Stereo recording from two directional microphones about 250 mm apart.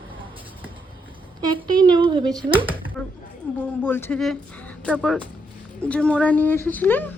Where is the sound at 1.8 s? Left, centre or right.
Centre.